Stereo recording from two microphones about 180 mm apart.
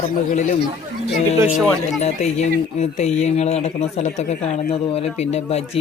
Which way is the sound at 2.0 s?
40° left (ahead or behind).